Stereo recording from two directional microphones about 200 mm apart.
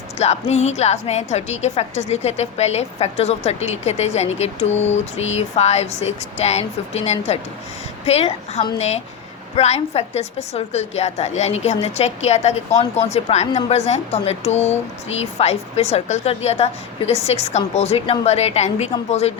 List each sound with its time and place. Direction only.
0.2 s a woman's voice: 35° left (ahead or behind)